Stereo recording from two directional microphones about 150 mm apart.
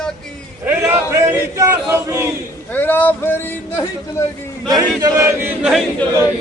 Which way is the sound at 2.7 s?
10° left (ahead or behind).